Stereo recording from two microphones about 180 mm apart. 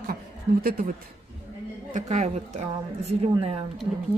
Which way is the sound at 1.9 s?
45° right (ahead or behind).